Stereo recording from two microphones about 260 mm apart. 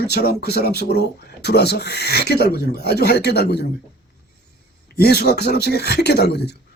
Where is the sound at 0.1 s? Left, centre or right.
Left.